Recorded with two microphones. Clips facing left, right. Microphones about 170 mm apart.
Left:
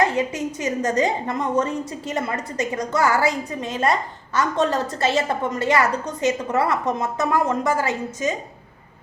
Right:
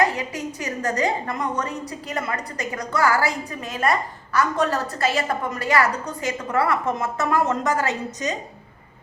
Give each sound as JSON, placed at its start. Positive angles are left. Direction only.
{"t": 0.0, "sound": "a woman's voice", "side_deg": 20}